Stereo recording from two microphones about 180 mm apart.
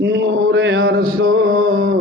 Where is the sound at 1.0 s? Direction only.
50° right (ahead or behind).